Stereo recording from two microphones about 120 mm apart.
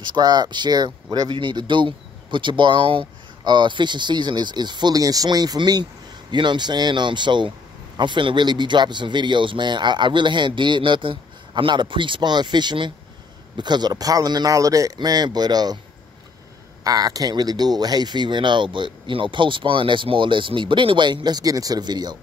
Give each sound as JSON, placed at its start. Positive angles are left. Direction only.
{"t": 0.0, "sound": "speech", "side_deg": -35}
{"t": 16.8, "sound": "speech", "side_deg": -30}